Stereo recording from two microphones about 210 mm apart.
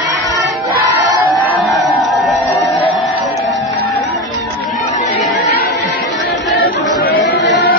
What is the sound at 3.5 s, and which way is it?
Music, 15° left (ahead or behind).